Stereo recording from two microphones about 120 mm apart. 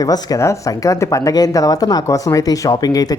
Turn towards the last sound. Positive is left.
turn(degrees=30)  # may be behind; listen again after turning